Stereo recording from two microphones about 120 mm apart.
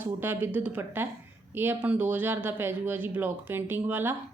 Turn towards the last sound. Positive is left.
turn(degrees=-15)  # may be behind; listen again after turning